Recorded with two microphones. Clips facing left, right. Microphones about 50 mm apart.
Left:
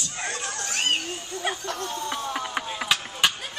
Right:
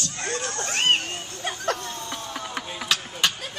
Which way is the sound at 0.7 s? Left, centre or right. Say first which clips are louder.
Right 4 dB; right.